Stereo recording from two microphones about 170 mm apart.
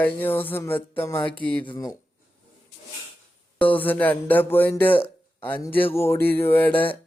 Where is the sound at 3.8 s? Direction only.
10° left (ahead or behind).